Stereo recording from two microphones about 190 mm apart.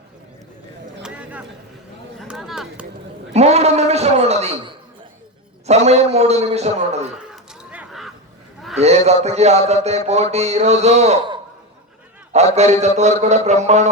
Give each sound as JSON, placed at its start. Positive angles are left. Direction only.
{"t": 1.0, "sound": "a sound", "side_deg": -5}
{"t": 3.3, "sound": "gargling", "side_deg": -35}
{"t": 5.6, "sound": "a man's voice", "side_deg": -35}
{"t": 7.6, "sound": "a sound", "side_deg": -5}
{"t": 8.8, "sound": "a man's voice", "side_deg": -35}
{"t": 12.5, "sound": "a man's voice", "side_deg": -35}